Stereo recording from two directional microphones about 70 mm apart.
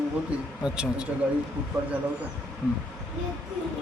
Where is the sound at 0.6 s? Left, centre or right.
Centre.